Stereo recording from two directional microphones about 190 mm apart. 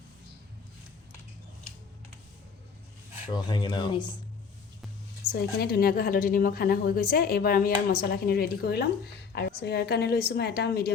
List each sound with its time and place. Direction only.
3.3 s speech: 20° left (ahead or behind)
5.3 s a woman's voice: 55° left (ahead or behind)